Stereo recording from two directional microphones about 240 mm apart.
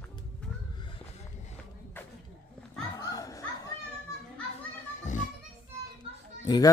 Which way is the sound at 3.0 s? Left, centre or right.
Centre.